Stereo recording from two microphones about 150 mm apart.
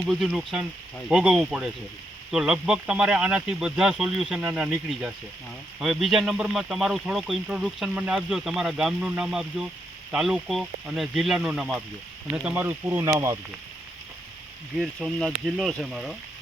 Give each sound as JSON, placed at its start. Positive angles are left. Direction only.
{"t": 0.1, "sound": "speech", "side_deg": -5}
{"t": 14.8, "sound": "speech", "side_deg": 0}